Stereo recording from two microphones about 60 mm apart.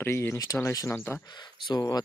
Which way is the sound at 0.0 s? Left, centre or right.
Left.